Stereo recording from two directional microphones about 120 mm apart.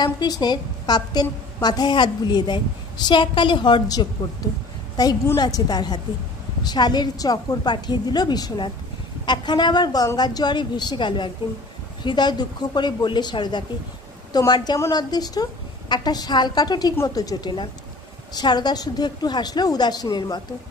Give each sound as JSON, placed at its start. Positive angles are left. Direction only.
{"t": 0.0, "sound": "a woman's voice", "side_deg": 35}